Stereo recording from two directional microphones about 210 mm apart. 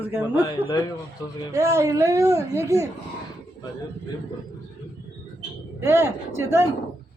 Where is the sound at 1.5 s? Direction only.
15° right (ahead or behind).